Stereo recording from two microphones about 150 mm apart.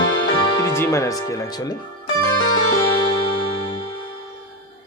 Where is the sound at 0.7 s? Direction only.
20° left (ahead or behind).